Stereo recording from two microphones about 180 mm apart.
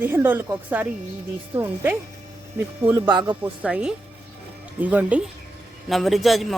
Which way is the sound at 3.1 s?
25° right (ahead or behind).